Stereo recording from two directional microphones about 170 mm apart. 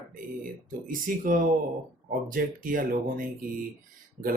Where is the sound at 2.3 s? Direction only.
55° right (ahead or behind).